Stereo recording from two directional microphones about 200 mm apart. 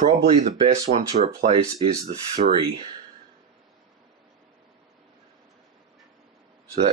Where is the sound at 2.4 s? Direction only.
55° right (ahead or behind).